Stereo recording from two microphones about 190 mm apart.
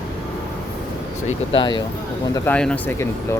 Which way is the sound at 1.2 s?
25° left (ahead or behind).